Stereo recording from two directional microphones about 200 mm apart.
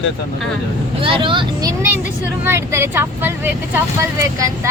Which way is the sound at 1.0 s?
25° right (ahead or behind).